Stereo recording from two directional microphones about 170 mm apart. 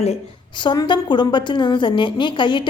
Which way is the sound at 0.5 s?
25° left (ahead or behind).